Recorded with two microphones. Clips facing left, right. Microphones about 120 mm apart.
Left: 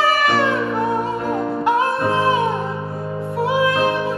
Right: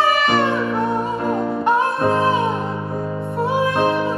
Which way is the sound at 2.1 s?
Centre (ahead or behind).